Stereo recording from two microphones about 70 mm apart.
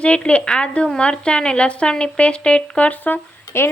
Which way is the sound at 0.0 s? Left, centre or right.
Centre.